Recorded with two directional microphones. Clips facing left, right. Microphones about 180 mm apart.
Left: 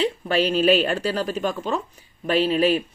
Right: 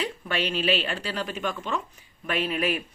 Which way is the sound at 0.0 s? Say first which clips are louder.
Left 8 dB; 35° left (ahead or behind).